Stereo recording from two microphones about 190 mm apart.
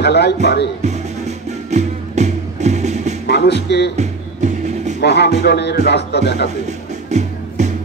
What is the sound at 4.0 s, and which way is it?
Music, 40° right (ahead or behind).